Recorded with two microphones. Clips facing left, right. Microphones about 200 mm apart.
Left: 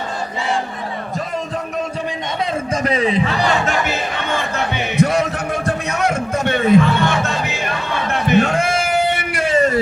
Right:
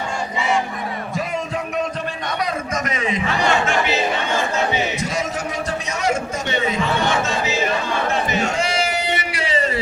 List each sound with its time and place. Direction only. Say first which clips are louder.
2.7 s a man's voice: left 8 dB; 30° left (ahead or behind)
3.8 s music: right 2 dB; 55° left (ahead or behind)
8.1 s a sound: left 10 dB; 60° left (ahead or behind)